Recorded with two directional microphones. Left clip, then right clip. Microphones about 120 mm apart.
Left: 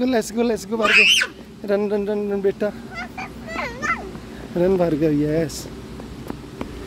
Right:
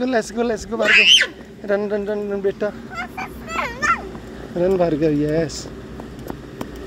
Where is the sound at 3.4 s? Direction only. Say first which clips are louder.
Right 4 dB; 90° right.